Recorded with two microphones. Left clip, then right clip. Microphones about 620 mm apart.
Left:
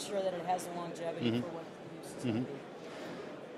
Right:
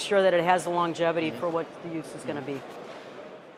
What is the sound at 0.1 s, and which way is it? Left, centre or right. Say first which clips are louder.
Speech: right 13 dB; right.